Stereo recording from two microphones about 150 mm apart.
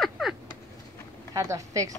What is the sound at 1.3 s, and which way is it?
Speech, 20° right (ahead or behind).